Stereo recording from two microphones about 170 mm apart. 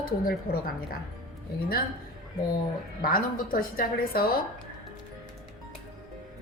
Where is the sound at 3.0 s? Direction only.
55° left (ahead or behind).